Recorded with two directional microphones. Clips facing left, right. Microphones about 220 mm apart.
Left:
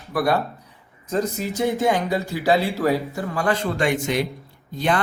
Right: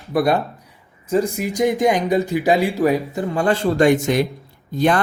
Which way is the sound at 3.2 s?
25° right (ahead or behind).